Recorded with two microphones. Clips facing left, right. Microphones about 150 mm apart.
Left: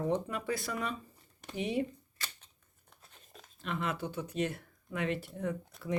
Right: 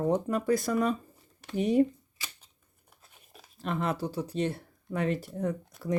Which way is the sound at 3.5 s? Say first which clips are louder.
Right 5 dB; 40° right (ahead or behind).